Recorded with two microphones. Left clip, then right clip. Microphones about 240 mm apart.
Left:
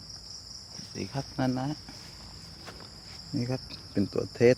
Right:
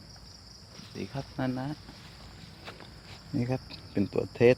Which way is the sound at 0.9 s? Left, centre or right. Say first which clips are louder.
Left 2 dB; left.